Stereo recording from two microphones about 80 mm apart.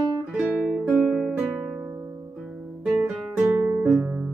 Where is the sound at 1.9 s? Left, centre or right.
Right.